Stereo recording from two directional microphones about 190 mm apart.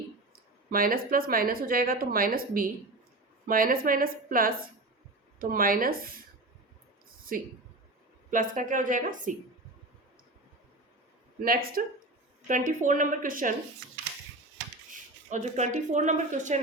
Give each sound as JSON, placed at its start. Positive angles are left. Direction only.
{"t": 0.7, "sound": "a woman's voice", "side_deg": -50}
{"t": 7.3, "sound": "a woman's voice", "side_deg": -50}
{"t": 11.4, "sound": "a woman's voice", "side_deg": -50}
{"t": 15.3, "sound": "speech", "side_deg": -40}